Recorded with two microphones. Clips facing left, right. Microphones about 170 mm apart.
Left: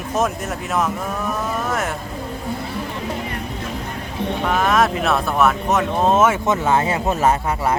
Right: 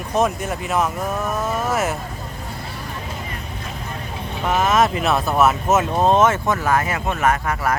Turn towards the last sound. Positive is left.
turn(degrees=30)  # may be behind; listen again after turning